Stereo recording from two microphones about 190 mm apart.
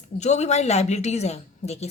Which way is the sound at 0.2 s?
35° left (ahead or behind).